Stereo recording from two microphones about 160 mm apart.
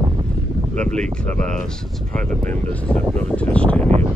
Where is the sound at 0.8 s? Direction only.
5° left (ahead or behind).